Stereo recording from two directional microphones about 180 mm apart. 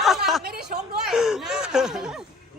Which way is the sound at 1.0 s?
5° right (ahead or behind).